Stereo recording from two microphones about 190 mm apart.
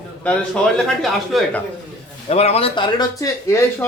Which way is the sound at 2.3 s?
35° left (ahead or behind).